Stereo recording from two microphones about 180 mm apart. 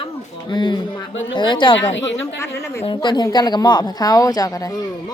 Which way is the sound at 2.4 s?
15° left (ahead or behind).